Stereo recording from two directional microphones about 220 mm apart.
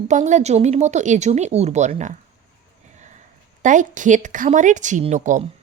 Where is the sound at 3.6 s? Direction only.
35° right (ahead or behind).